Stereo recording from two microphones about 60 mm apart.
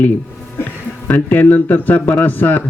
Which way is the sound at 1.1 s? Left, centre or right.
Left.